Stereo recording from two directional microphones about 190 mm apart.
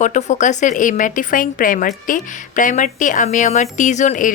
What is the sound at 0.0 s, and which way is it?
A woman's voice, 40° left (ahead or behind).